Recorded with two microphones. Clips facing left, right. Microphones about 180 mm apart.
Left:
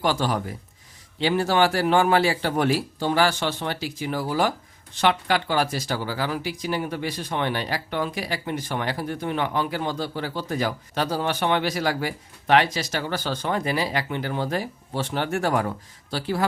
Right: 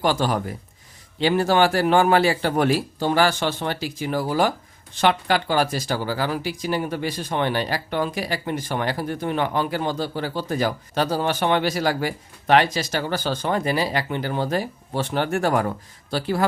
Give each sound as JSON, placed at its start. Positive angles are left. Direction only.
{"t": 0.0, "sound": "a man's voice", "side_deg": -45}